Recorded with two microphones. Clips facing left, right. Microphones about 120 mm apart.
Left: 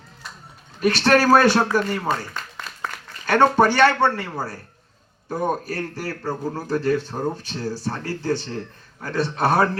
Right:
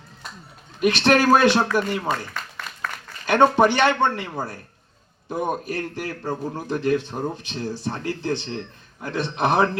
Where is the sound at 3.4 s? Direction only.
20° right (ahead or behind).